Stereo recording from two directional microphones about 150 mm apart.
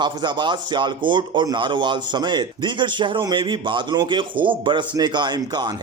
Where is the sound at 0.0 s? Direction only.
30° right (ahead or behind).